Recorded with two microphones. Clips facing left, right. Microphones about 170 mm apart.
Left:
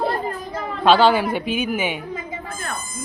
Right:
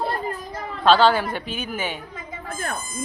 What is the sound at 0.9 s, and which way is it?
A woman's voice, 10° left (ahead or behind).